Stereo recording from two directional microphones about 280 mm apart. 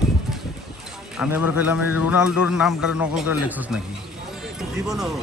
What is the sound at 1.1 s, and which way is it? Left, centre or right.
Speech, centre.